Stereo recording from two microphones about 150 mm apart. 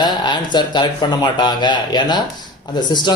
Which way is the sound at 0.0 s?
30° left (ahead or behind).